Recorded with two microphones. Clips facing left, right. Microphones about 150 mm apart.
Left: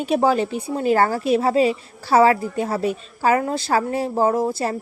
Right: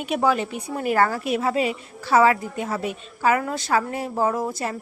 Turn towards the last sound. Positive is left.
turn(degrees=30)  # may be behind; listen again after turning